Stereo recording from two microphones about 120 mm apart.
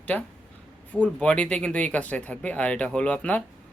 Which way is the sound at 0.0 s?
10° left (ahead or behind).